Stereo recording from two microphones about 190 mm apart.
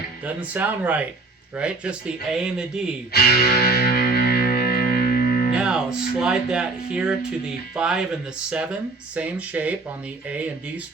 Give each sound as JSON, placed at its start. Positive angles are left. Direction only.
{"t": 0.3, "sound": "speech", "side_deg": -10}
{"t": 3.1, "sound": "music", "side_deg": 55}
{"t": 5.5, "sound": "speech", "side_deg": -5}